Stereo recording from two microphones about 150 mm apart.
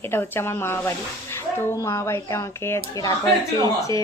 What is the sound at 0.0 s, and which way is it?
A woman's voice, 15° left (ahead or behind).